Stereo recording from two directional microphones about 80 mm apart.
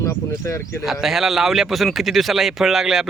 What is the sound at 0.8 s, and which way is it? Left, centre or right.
A man's voice, centre.